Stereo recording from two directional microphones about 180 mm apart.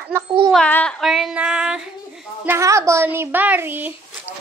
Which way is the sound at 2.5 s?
15° right (ahead or behind).